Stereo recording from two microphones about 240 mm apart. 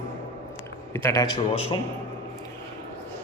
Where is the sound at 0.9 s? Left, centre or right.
Centre.